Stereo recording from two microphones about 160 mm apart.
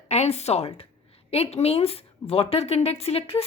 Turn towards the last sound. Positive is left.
turn(degrees=40)  # may be behind; listen again after turning